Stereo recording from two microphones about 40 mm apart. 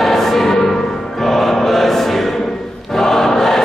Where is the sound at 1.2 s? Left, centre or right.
Centre.